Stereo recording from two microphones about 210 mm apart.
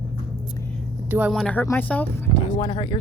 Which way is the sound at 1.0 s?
10° right (ahead or behind).